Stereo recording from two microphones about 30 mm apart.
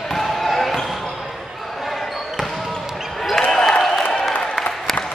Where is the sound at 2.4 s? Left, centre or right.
Centre.